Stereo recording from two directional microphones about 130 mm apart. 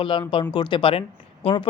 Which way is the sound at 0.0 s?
40° left (ahead or behind).